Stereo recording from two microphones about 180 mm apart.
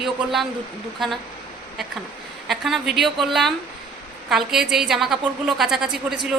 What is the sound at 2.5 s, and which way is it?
A woman's voice, centre (ahead or behind).